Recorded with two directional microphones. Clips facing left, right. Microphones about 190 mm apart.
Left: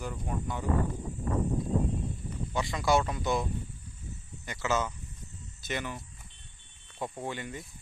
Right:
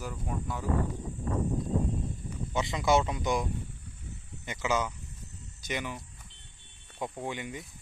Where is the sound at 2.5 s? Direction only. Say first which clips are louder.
Right 1 dB; 20° right (ahead or behind).